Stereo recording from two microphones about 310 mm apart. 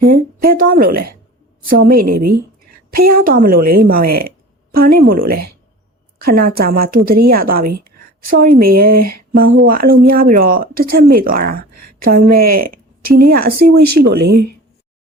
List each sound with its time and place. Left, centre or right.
0.0 s a woman's voice: right